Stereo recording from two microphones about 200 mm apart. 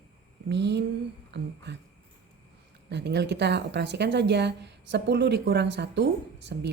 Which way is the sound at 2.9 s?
60° right (ahead or behind).